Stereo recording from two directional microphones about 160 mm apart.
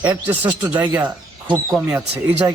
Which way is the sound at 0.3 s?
10° right (ahead or behind).